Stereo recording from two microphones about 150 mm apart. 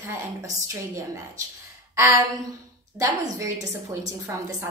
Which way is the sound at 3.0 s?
20° right (ahead or behind).